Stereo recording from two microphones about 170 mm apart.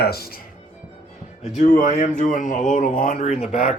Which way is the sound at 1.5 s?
45° left (ahead or behind).